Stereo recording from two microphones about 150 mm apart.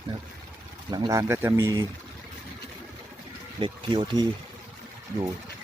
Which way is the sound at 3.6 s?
35° right (ahead or behind).